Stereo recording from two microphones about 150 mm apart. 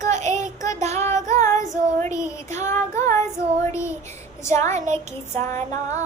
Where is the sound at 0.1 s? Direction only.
50° right (ahead or behind).